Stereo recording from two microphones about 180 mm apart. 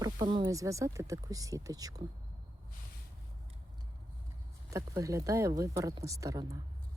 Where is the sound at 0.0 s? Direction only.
25° right (ahead or behind).